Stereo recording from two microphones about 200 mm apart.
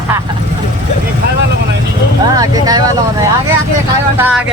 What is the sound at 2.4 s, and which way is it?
Speech, 20° right (ahead or behind).